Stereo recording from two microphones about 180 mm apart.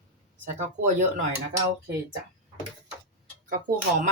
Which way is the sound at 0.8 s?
45° right (ahead or behind).